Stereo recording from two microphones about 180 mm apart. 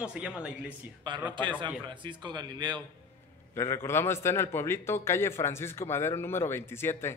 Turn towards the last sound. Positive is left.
turn(degrees=15)  # may be behind; listen again after turning